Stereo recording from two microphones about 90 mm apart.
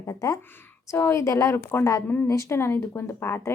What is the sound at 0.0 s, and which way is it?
Speech, 35° left (ahead or behind).